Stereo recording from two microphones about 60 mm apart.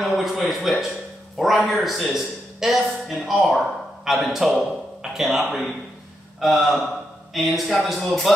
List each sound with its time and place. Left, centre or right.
0.0 s speech: centre